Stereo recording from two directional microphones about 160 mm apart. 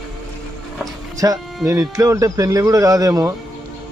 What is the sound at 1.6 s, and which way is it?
Speech, 20° right (ahead or behind).